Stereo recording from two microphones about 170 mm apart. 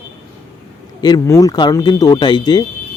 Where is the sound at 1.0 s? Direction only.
25° left (ahead or behind).